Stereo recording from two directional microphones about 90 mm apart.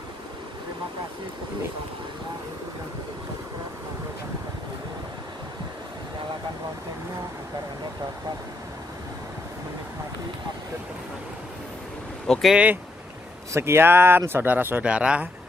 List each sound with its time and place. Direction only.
12.3 s speech: centre (ahead or behind)
13.5 s speech: 30° right (ahead or behind); by 15.2 s 10° right (ahead or behind)